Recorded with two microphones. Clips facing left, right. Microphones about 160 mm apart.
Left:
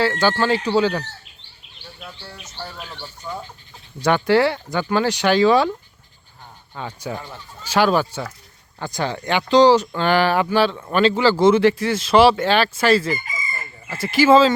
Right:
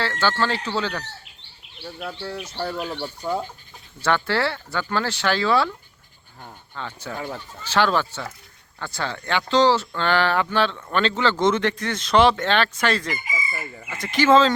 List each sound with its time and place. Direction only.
0.0 s speech: 15° left (ahead or behind)
2.0 s speech: 55° right (ahead or behind)
3.0 s speech: 35° right (ahead or behind)
4.0 s speech: 15° left (ahead or behind)
6.7 s speech: 15° left (ahead or behind)